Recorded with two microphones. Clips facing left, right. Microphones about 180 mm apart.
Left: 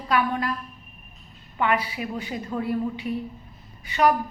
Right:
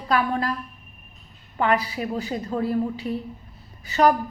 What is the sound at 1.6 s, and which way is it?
A woman's voice, 40° right (ahead or behind).